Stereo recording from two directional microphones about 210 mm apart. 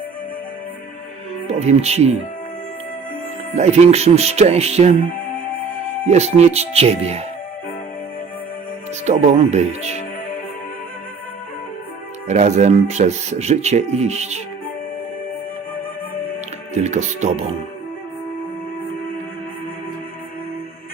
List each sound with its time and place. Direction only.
1.5 s speech: 30° right (ahead or behind)
3.5 s speech: 30° right (ahead or behind)
6.1 s speech: 30° right (ahead or behind)
9.0 s speech: 35° right (ahead or behind)
12.3 s speech: 35° right (ahead or behind)
16.7 s speech: 35° right (ahead or behind)